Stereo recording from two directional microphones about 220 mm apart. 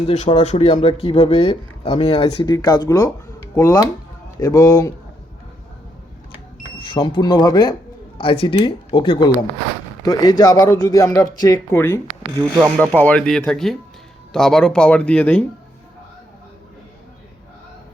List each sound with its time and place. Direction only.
0.1 s speech: 30° left (ahead or behind); by 4.9 s 15° left (ahead or behind)
6.7 s speech: 25° left (ahead or behind); by 15.4 s 5° left (ahead or behind)